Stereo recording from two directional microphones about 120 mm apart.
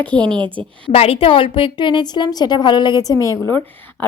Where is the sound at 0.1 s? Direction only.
40° right (ahead or behind).